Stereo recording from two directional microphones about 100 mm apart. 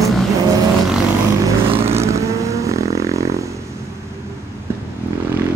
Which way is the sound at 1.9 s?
30° right (ahead or behind).